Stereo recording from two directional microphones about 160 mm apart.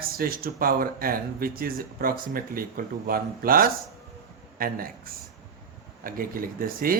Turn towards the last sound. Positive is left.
turn(degrees=-60)  # may be behind; listen again after turning